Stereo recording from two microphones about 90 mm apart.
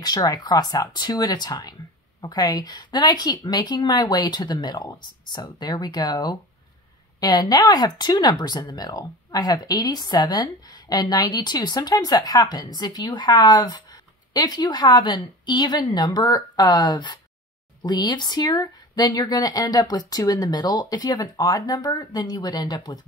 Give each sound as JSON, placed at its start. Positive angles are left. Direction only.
{"t": 0.0, "sound": "speech", "side_deg": 45}